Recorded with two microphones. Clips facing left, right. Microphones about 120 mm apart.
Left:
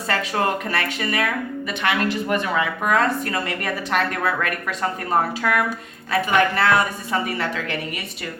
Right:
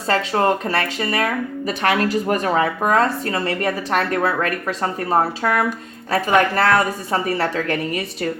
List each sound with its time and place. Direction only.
0.1 s speech: 30° right (ahead or behind)